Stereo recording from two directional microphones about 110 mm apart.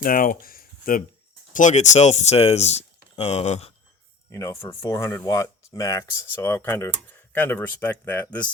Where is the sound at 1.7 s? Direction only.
90° left.